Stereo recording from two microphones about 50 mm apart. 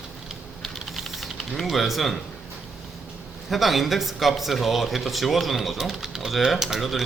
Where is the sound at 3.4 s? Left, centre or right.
Centre.